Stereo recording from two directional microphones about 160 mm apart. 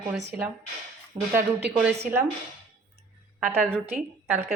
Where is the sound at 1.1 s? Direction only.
20° right (ahead or behind).